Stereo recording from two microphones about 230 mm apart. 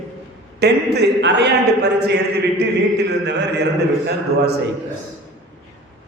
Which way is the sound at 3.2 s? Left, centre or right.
Right.